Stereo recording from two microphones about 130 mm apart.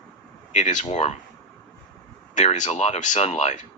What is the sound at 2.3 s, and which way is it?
Speech, 70° left (ahead or behind).